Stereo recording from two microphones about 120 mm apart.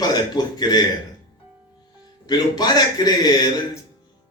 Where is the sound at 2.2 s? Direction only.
35° left (ahead or behind).